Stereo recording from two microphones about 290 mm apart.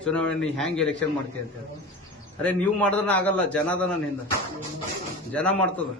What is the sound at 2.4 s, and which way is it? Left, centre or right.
A man's voice, centre.